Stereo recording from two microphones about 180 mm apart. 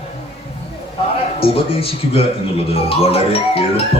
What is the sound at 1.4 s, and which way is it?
Speech, 30° left (ahead or behind).